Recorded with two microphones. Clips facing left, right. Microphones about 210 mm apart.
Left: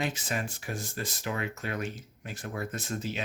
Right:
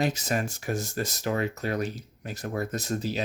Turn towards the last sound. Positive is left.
turn(degrees=-35)  # may be behind; listen again after turning